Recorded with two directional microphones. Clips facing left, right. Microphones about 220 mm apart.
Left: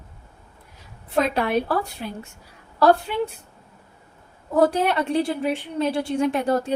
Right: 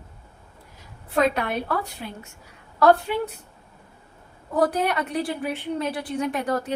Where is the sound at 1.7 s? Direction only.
35° left (ahead or behind).